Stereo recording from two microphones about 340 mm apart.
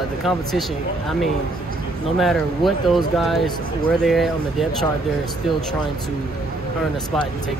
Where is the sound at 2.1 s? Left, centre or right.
Centre.